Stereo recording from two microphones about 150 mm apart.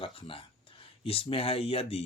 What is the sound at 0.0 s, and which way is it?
Speech, 35° left (ahead or behind).